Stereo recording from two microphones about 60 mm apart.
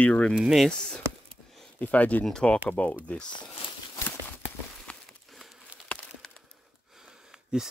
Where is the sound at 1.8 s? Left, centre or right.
Left.